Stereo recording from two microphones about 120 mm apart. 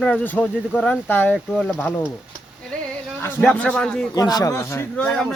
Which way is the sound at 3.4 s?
10° left (ahead or behind).